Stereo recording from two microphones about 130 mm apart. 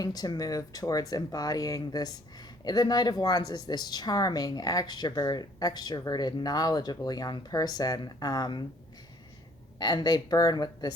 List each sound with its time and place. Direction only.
0.0 s speech: 30° left (ahead or behind)
9.7 s speech: 30° left (ahead or behind)